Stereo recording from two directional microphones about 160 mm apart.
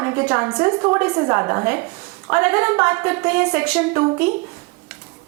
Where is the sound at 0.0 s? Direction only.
15° right (ahead or behind).